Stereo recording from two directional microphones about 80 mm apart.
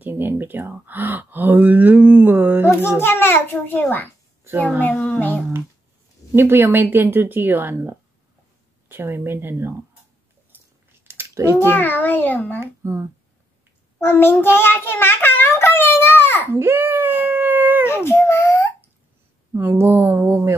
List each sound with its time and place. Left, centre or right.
0.0 s speech: right
3.0 s a child's voice: left
4.5 s a woman's voice: centre
4.8 s child singing: centre
6.3 s a woman's voice: right
11.1 s a sound: right
11.4 s a child's voice: left
12.5 s a child's voice: right
13.9 s child singing: left
16.4 s baby cry: right
17.8 s a sound: left
19.5 s a woman's voice: right